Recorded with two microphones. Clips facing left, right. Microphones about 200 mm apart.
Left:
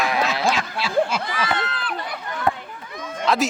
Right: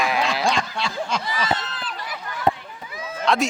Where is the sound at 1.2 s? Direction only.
60° left (ahead or behind).